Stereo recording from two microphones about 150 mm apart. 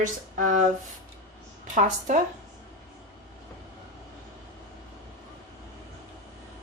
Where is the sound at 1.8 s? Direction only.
55° right (ahead or behind).